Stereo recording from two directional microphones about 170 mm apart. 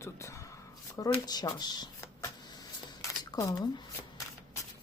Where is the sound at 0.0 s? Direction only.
15° left (ahead or behind).